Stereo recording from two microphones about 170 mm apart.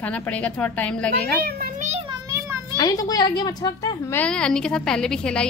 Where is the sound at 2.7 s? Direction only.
20° left (ahead or behind).